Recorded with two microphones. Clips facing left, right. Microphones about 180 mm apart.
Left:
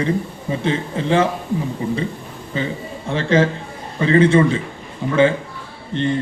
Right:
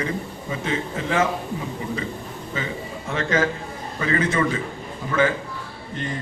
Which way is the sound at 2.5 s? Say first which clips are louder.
Left 6 dB; 30° left (ahead or behind).